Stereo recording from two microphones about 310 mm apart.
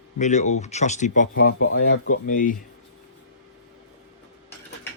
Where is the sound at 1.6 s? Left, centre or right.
Left.